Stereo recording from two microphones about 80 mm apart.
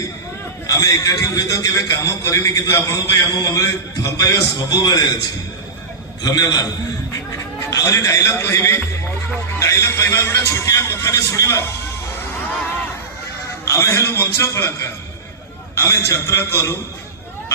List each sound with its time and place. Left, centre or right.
0.7 s a man's voice: left
6.2 s a man's voice: left
7.7 s a man's voice: left
13.7 s a man's voice: left